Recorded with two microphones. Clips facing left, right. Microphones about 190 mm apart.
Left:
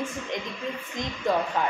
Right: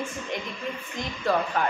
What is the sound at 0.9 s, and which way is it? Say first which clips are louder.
Speech: even; 20° left (ahead or behind).